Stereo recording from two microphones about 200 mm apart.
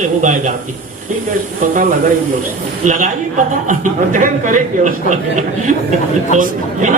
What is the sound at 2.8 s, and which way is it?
A man's voice, 40° right (ahead or behind).